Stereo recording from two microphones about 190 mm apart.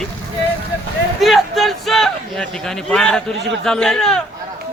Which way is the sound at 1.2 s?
Centre (ahead or behind).